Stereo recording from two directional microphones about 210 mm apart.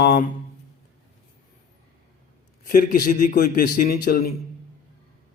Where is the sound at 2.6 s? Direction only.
40° left (ahead or behind).